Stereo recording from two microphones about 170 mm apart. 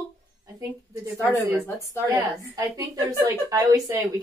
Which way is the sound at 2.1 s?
20° right (ahead or behind).